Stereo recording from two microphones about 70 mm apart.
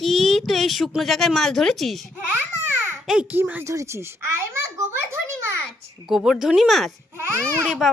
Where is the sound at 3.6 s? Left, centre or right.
Right.